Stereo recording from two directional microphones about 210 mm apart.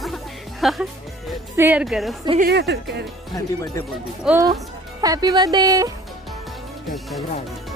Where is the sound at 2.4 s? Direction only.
55° right (ahead or behind).